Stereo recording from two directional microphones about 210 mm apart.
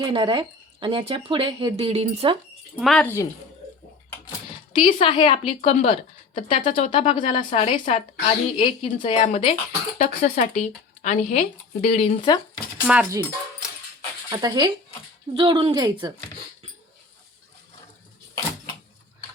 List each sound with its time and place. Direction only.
0.0 s speech: 20° right (ahead or behind)
2.7 s speech: centre (ahead or behind)
4.7 s a woman's voice: 25° left (ahead or behind)
12.9 s speech: 10° right (ahead or behind)
14.3 s speech: 20° right (ahead or behind)